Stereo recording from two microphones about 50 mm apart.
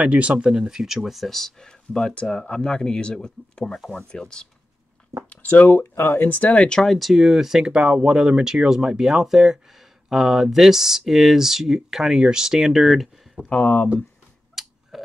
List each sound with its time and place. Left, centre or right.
0.0 s speech: right; by 4.5 s centre
5.3 s speech: left
6.3 s speech: left
6.8 s speech: centre
13.5 s speech: left
14.5 s a sound: centre